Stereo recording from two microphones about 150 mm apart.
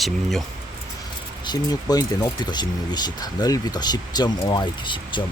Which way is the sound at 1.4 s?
25° left (ahead or behind).